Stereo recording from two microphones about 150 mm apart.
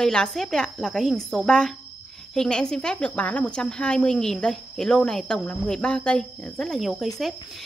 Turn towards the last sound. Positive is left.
turn(degrees=0)  # may be behind; listen again after turning